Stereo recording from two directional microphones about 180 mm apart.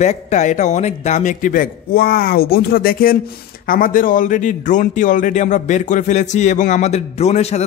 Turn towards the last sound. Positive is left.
turn(degrees=35)  # may be behind; listen again after turning